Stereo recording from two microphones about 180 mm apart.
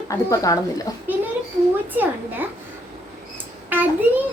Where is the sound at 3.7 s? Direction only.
10° right (ahead or behind).